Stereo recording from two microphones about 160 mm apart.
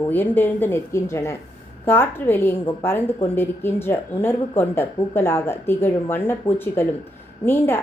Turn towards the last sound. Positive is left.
turn(degrees=15)  # may be behind; listen again after turning